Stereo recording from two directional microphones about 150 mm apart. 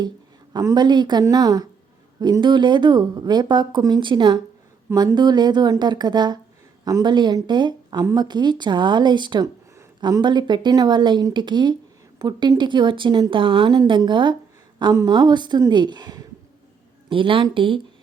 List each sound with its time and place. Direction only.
0.5 s speech: 25° right (ahead or behind)